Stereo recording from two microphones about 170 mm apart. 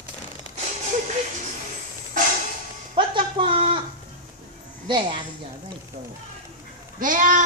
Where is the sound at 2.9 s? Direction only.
30° right (ahead or behind).